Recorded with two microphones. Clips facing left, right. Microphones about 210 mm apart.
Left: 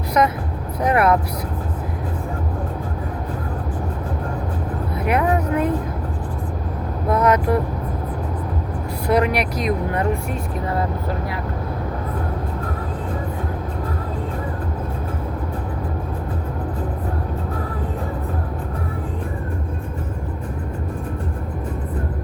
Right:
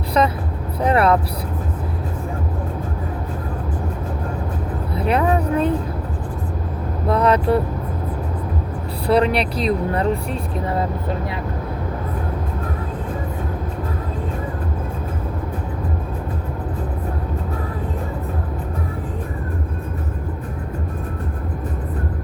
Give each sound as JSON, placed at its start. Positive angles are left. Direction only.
{"t": 0.8, "sound": "vehicle", "side_deg": -30}
{"t": 4.9, "sound": "music", "side_deg": -30}
{"t": 7.1, "sound": "vehicle", "side_deg": -30}
{"t": 9.0, "sound": "speech", "side_deg": -30}